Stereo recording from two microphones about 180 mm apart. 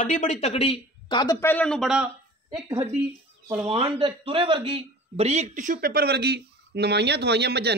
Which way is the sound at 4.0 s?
30° right (ahead or behind).